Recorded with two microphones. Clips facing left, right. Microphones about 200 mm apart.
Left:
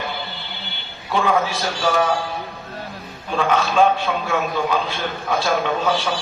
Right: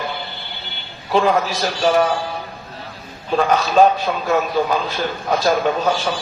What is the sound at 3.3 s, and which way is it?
A man's voice, 40° right (ahead or behind).